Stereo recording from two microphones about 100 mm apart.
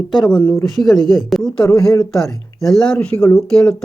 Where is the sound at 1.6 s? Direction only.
35° left (ahead or behind).